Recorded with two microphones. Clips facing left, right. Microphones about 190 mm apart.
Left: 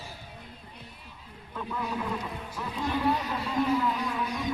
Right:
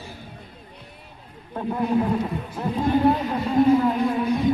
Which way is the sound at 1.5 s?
45° right (ahead or behind).